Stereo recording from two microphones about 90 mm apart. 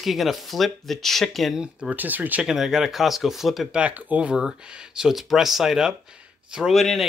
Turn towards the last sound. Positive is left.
turn(degrees=0)  # may be behind; listen again after turning